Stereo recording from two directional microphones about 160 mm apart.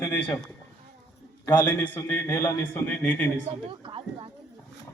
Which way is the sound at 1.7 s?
10° left (ahead or behind).